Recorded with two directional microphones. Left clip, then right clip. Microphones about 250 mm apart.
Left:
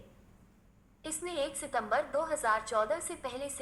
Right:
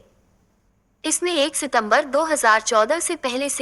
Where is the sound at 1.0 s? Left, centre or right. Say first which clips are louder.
Right 15 dB; right.